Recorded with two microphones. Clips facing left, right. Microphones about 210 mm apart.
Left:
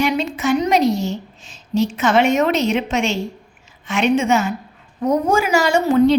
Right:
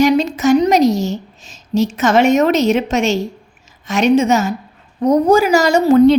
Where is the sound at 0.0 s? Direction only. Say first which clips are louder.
Right 6 dB; 40° right (ahead or behind).